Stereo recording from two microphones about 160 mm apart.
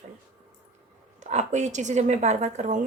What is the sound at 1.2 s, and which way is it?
A woman's voice, 45° right (ahead or behind).